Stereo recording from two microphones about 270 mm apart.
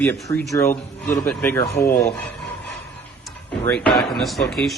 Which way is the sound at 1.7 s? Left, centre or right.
Left.